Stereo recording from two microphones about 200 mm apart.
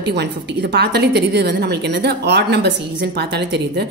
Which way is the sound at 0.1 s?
55° right (ahead or behind).